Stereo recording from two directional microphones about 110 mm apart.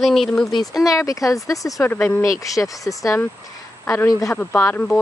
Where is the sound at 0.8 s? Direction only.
30° left (ahead or behind).